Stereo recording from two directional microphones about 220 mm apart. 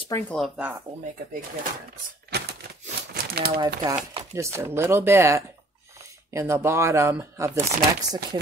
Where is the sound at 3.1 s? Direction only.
45° right (ahead or behind).